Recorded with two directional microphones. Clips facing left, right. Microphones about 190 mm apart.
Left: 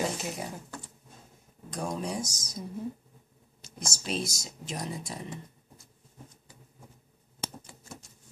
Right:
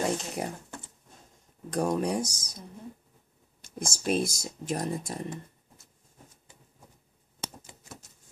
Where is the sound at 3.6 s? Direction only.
55° right (ahead or behind).